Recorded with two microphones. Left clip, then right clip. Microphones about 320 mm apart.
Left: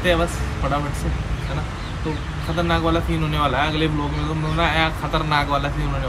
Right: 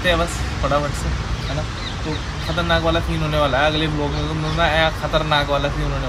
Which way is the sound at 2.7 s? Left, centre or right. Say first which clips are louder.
Right 2 dB; centre.